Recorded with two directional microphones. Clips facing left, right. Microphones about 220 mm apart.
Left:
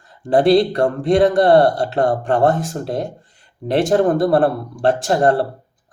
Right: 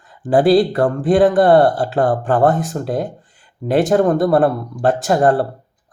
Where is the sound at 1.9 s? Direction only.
25° left (ahead or behind).